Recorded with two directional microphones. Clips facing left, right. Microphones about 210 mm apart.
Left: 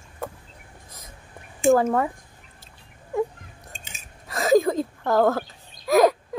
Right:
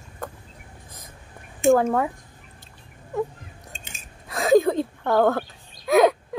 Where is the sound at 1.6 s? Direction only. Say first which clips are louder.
Even; centre (ahead or behind).